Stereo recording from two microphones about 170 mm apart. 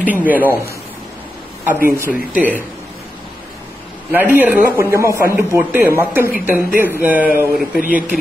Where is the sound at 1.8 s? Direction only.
15° right (ahead or behind).